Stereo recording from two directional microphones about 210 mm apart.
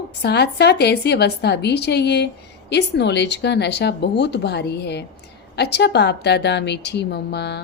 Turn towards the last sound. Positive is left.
turn(degrees=50)  # may be behind; listen again after turning